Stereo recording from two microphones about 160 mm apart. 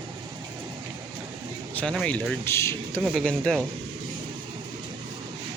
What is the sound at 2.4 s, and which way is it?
Speech, 15° left (ahead or behind).